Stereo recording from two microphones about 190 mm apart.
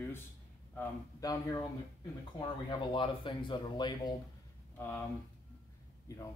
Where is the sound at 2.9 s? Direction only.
25° left (ahead or behind).